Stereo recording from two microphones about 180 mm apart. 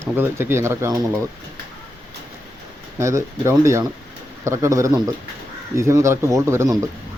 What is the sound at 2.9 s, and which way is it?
Speech, 15° right (ahead or behind).